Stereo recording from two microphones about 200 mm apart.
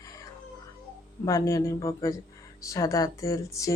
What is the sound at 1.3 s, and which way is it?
Speech, 15° left (ahead or behind).